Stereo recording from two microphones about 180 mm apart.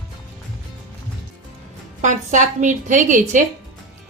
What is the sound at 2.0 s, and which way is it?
A woman's voice, 45° right (ahead or behind).